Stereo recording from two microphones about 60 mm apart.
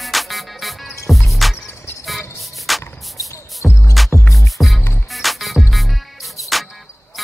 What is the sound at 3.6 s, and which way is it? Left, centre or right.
Music, centre.